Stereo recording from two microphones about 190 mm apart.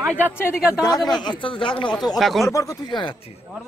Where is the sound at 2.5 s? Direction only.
15° left (ahead or behind).